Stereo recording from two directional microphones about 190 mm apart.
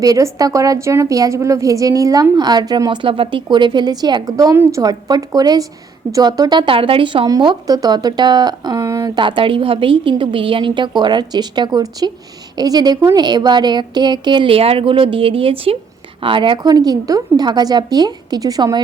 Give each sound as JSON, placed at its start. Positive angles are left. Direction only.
{"t": 0.0, "sound": "speech", "side_deg": -20}